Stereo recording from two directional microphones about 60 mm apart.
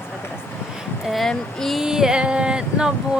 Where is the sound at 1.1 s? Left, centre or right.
Centre.